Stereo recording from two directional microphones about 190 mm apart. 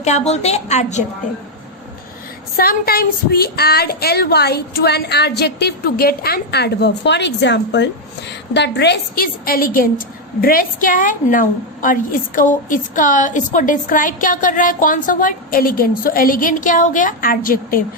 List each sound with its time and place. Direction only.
0.0 s a woman's voice: 35° left (ahead or behind)
2.6 s a woman's voice: 50° left (ahead or behind)